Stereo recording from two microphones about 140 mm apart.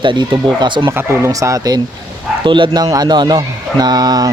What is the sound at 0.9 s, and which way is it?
Speech, 20° right (ahead or behind).